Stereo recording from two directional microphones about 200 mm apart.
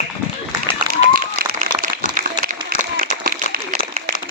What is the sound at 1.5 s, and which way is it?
Applause, 45° right (ahead or behind).